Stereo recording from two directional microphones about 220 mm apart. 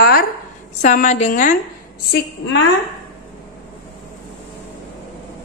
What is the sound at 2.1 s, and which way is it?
Speech, 60° left (ahead or behind).